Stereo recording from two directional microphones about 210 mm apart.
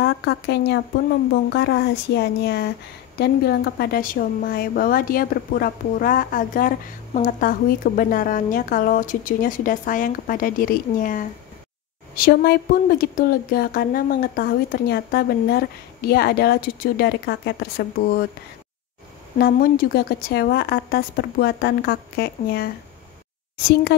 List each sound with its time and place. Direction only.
0.0 s a woman's voice: 55° left (ahead or behind)
19.3 s a woman's voice: 45° left (ahead or behind)
23.7 s a woman's voice: 55° left (ahead or behind)